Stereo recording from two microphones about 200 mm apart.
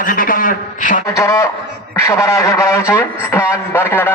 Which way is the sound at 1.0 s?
15° left (ahead or behind).